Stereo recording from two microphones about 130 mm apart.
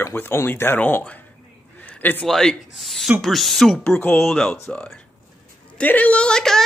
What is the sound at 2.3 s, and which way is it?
A woman's voice, 5° left (ahead or behind).